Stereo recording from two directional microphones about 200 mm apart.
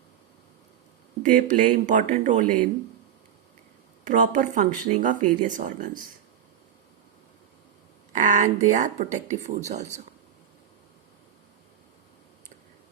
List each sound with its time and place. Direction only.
1.2 s speech: 40° right (ahead or behind)
4.0 s speech: 40° right (ahead or behind)
8.1 s speech: 40° right (ahead or behind)